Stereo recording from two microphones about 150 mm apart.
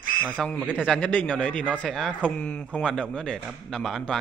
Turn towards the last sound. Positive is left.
turn(degrees=5)  # may be behind; listen again after turning